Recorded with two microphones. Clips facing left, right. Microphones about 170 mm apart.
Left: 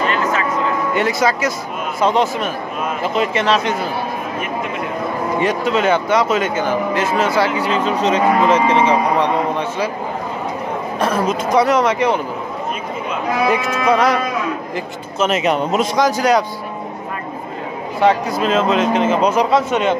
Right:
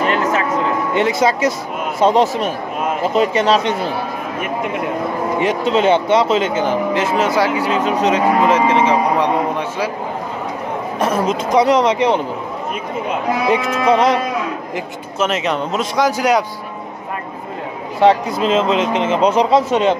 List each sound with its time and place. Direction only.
0.9 s a man's voice: 25° right (ahead or behind)
5.4 s speech: 25° right (ahead or behind); by 9.8 s 10° right (ahead or behind)
11.0 s a man's voice: 15° right (ahead or behind)
13.5 s a man's voice: 25° right (ahead or behind)
15.1 s a man's voice: 5° left (ahead or behind)
16.0 s speech: 10° right (ahead or behind)
18.0 s a man's voice: 25° right (ahead or behind)